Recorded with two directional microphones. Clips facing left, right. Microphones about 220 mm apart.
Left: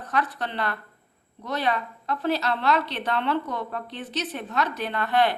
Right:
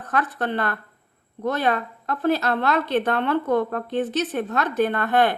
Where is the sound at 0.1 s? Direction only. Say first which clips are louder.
Right 4 dB; 50° right (ahead or behind).